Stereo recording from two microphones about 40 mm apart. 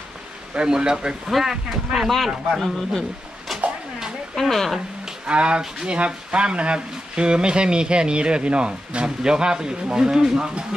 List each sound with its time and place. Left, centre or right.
0.6 s speech: centre
2.0 s a man's voice: centre
5.2 s speech: right